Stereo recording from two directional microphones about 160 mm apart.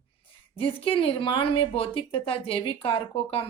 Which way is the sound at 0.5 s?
35° left (ahead or behind).